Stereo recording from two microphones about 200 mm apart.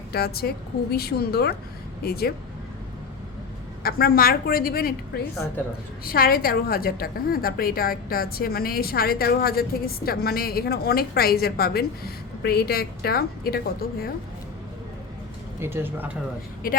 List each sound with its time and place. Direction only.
0.1 s a woman's voice: 50° left (ahead or behind)
3.8 s a woman's voice: 50° left (ahead or behind)
15.6 s speech: 10° right (ahead or behind)